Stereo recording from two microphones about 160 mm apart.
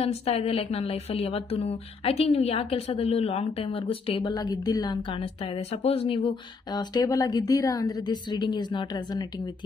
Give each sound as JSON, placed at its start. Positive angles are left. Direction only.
{"t": 0.0, "sound": "a woman's voice", "side_deg": 40}
{"t": 4.3, "sound": "speech", "side_deg": 25}